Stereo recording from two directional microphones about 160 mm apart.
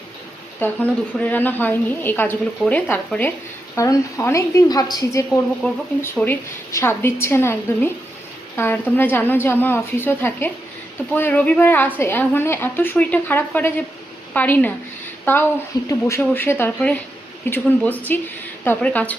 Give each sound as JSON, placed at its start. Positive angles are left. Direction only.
{"t": 0.6, "sound": "a woman's voice", "side_deg": 10}
{"t": 5.6, "sound": "a woman's voice", "side_deg": 10}